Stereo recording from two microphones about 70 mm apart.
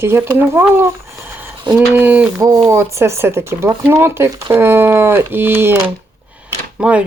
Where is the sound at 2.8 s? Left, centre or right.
Right.